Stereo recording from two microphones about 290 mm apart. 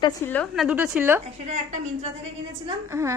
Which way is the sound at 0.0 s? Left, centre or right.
Centre.